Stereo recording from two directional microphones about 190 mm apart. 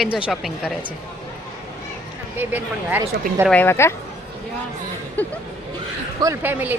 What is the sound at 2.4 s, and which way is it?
A woman's voice, 10° right (ahead or behind).